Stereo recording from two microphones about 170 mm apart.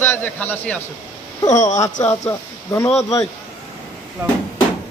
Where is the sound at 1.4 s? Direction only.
20° left (ahead or behind).